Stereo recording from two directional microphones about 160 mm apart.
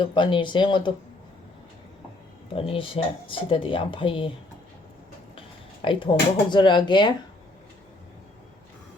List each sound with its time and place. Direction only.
0.0 s speech: 30° left (ahead or behind)
2.6 s speech: 35° left (ahead or behind)
5.3 s a sound: 30° left (ahead or behind)
6.5 s speech: 30° left (ahead or behind)